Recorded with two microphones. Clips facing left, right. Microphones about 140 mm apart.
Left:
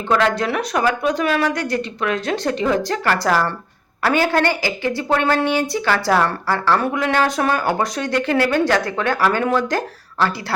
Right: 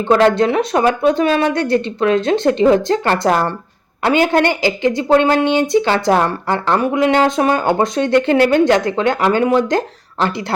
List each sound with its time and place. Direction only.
0.1 s a woman's voice: 30° right (ahead or behind)